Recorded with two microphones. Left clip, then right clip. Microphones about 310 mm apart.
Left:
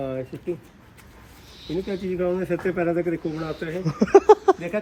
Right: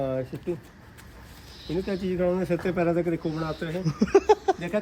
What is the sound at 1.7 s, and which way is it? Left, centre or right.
Speech, right.